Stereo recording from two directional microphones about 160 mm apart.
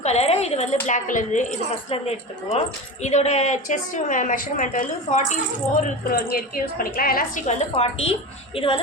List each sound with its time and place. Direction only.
0.0 s a woman's voice: 40° left (ahead or behind)
1.9 s a woman's voice: 40° left (ahead or behind)
6.1 s a woman's voice: 70° left (ahead or behind); by 8.8 s 35° left (ahead or behind)